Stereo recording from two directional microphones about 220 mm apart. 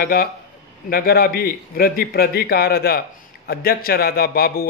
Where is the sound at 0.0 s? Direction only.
45° left (ahead or behind).